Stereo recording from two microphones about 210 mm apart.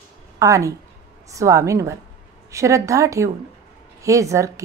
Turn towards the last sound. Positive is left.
turn(degrees=-15)  # may be behind; listen again after turning